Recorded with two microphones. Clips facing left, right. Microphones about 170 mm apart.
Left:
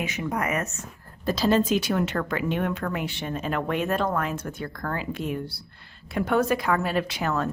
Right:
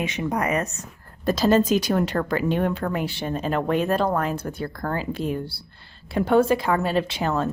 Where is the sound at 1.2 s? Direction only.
45° right (ahead or behind).